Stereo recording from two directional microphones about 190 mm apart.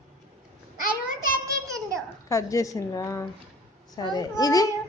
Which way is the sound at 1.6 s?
15° right (ahead or behind).